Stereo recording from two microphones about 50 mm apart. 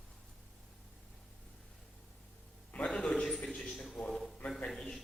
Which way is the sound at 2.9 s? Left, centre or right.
Centre.